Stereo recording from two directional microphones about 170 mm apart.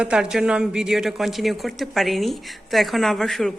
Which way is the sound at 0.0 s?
5° right (ahead or behind).